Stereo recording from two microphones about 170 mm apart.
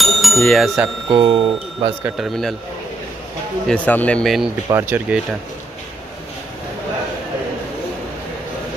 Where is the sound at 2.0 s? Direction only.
Centre (ahead or behind).